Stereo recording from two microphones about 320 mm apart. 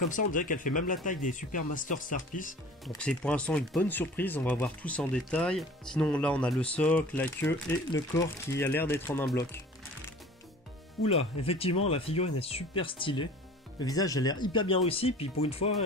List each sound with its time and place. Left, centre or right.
0.3 s speech: left
2.9 s speech: centre
11.0 s speech: centre